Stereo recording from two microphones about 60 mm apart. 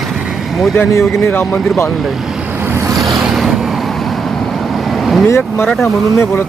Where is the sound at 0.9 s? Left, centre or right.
Left.